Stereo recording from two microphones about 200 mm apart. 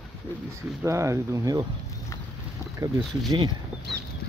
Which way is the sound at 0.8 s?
15° right (ahead or behind).